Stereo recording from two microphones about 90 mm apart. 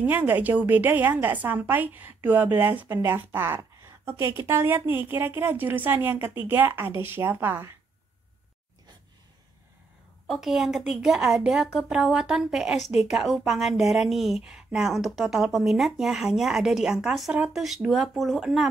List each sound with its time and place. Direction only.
0.0 s a woman's voice: 20° right (ahead or behind)
10.2 s a woman's voice: 5° right (ahead or behind)